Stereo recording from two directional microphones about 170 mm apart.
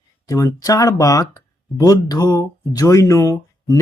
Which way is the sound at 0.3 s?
20° left (ahead or behind).